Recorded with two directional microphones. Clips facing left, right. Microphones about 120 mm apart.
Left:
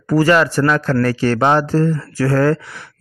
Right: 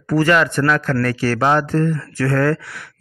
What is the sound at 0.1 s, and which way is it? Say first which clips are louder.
Speech: left 2 dB; 35° left (ahead or behind).